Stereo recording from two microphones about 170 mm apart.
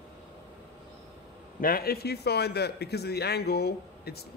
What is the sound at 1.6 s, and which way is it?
A man's voice, 60° left (ahead or behind).